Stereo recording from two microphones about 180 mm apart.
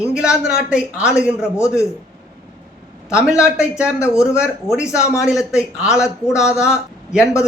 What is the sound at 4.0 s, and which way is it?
Speech, 15° left (ahead or behind).